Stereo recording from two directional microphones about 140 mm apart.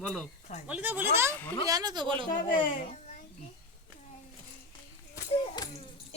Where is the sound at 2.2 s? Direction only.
80° left.